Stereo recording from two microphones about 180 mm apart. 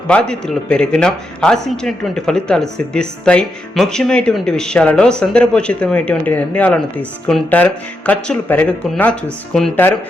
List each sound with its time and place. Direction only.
0.1 s speech: 5° left (ahead or behind)